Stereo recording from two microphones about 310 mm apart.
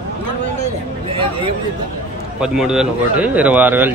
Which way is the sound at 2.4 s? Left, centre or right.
Centre.